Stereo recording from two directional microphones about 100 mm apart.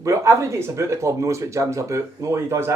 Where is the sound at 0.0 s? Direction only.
30° right (ahead or behind).